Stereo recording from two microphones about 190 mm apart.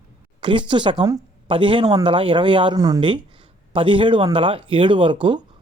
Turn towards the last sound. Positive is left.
turn(degrees=-25)  # may be behind; listen again after turning